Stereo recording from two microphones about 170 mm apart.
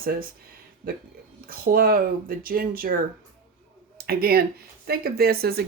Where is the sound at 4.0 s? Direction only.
65° right (ahead or behind).